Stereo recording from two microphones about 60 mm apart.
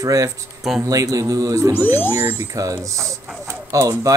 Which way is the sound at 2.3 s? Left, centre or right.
Right.